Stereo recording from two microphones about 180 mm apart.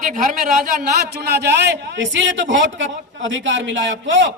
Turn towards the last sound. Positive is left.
turn(degrees=-80)